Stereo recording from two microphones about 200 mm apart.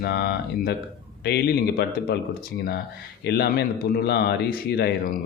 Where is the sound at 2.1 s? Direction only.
50° left (ahead or behind).